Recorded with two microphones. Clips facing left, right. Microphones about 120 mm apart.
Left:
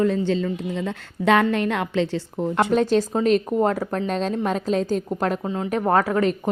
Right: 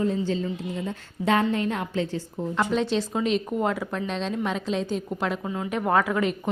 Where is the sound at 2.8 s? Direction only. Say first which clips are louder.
Left 5 dB; 45° left (ahead or behind).